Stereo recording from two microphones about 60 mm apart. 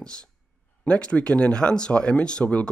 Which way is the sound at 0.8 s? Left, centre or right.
Centre.